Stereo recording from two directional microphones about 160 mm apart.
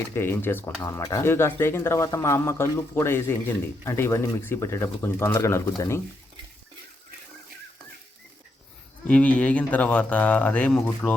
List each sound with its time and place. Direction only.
0.1 s speech: 15° left (ahead or behind)
9.0 s speech: 10° left (ahead or behind)